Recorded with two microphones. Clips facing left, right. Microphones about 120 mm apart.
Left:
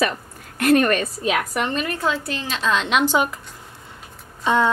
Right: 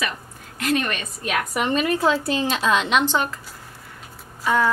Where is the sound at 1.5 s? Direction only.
10° right (ahead or behind).